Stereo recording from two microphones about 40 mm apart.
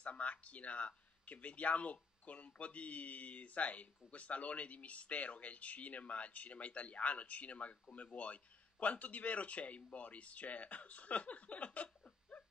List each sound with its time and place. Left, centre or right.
0.0 s speech: left